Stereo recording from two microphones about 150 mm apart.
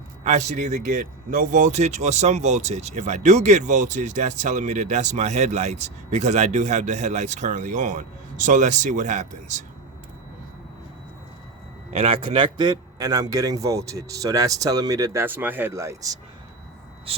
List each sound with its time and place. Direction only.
0.3 s speech: 50° right (ahead or behind)
11.9 s a man's voice: 40° right (ahead or behind); by 16.1 s 20° right (ahead or behind)